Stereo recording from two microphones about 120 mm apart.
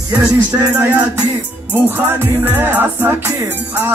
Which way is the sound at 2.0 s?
15° right (ahead or behind).